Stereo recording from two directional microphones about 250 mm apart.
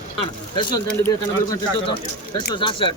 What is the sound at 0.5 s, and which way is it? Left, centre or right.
Speech, centre.